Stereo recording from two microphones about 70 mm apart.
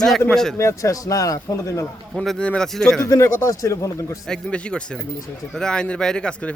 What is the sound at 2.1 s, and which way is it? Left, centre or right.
Speech, centre.